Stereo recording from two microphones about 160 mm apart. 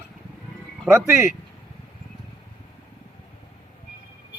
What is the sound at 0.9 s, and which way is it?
Speech, 15° right (ahead or behind).